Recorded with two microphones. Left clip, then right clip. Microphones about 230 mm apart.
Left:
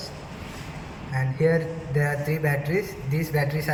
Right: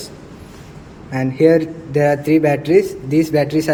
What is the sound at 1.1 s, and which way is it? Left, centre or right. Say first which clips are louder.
A man's voice: right 11 dB; right.